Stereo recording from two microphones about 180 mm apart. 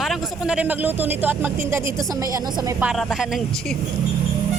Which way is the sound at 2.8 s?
5° right (ahead or behind).